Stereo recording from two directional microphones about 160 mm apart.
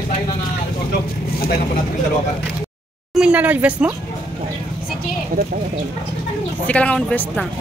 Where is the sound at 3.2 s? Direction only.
5° right (ahead or behind).